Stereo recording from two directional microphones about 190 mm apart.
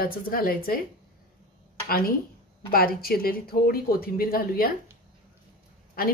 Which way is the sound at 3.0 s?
50° left (ahead or behind).